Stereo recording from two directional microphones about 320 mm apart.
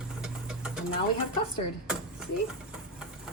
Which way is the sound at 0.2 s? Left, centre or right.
Centre.